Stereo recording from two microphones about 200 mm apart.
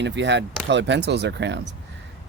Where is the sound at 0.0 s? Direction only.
60° right (ahead or behind).